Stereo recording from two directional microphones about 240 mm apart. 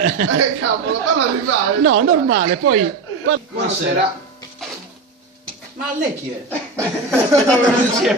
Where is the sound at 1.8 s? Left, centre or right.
Right.